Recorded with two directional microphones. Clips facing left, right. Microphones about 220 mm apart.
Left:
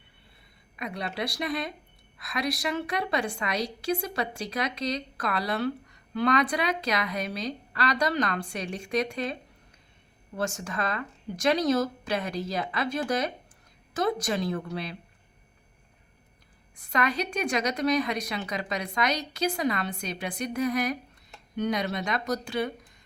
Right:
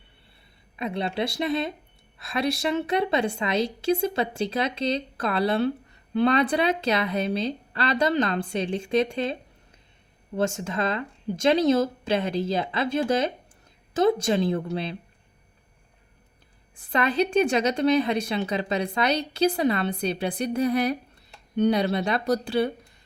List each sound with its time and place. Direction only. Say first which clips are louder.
0.8 s a woman's voice: right 5 dB; 25° right (ahead or behind)
16.9 s a woman's voice: right 6 dB; 30° right (ahead or behind)